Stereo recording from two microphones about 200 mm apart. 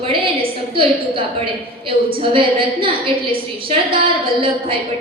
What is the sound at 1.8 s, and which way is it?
A woman's voice, 25° right (ahead or behind).